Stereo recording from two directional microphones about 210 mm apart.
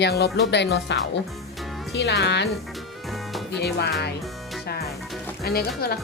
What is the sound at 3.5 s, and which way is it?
Speech, 50° left (ahead or behind).